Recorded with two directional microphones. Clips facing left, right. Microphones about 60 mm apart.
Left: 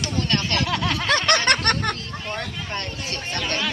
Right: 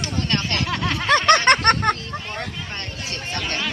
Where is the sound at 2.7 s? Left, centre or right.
Centre.